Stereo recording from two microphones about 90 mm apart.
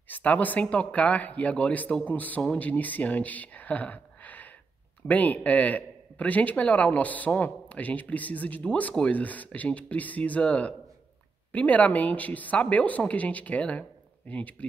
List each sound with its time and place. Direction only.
0.1 s a man's voice: 20° left (ahead or behind)